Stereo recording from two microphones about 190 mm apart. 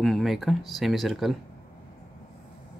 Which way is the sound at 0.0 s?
Centre (ahead or behind).